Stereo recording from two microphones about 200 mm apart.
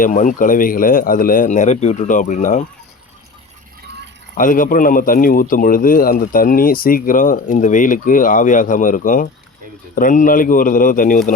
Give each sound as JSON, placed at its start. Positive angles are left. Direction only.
{"t": 0.0, "sound": "speech", "side_deg": 40}
{"t": 4.4, "sound": "speech", "side_deg": 40}